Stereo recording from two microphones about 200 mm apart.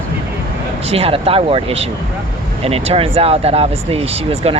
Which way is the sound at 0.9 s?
30° right (ahead or behind).